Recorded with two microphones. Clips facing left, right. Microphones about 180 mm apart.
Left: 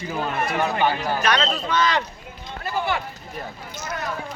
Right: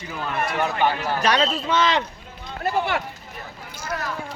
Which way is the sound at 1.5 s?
25° right (ahead or behind).